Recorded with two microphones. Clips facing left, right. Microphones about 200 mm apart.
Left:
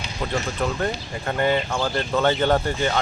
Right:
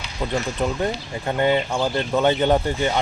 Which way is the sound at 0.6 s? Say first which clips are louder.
Right 1 dB; 20° right (ahead or behind).